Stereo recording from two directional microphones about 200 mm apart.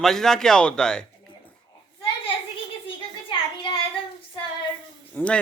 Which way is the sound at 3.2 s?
25° left (ahead or behind).